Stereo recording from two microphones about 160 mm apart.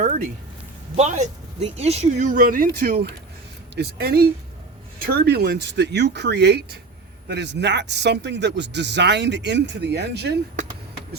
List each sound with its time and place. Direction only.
0.0 s a sound: 55° right (ahead or behind)
0.9 s speech: 45° right (ahead or behind)
2.3 s speech: 60° right (ahead or behind)
5.2 s speech: 90° right